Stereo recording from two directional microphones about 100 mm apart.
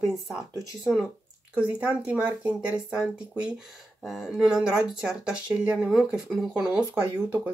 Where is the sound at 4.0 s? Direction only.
Centre (ahead or behind).